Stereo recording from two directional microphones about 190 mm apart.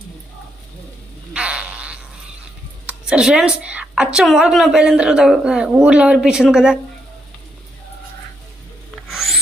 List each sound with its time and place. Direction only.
1.3 s insect: 5° right (ahead or behind)
2.8 s a woman's voice: 5° right (ahead or behind)
9.0 s rub: centre (ahead or behind)